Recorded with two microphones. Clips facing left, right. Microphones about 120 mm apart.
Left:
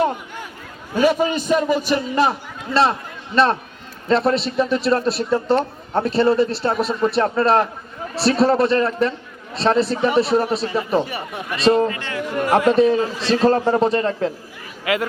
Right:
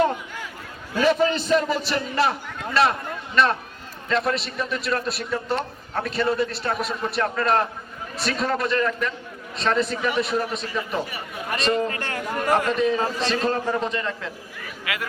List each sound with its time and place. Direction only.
0.9 s a man's voice: 15° left (ahead or behind); by 11.9 s 35° left (ahead or behind)
11.9 s speech: 45° right (ahead or behind)
12.6 s a man's voice: 35° left (ahead or behind)
13.0 s a man's voice: 40° right (ahead or behind)
13.3 s a man's voice: 40° left (ahead or behind)